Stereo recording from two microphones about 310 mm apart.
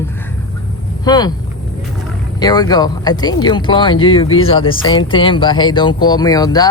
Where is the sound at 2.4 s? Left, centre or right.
Centre.